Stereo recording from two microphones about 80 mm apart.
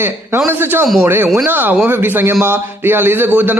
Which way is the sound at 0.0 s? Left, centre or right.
Right.